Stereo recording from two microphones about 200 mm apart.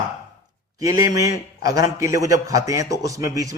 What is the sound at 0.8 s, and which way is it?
A man's voice, 15° right (ahead or behind).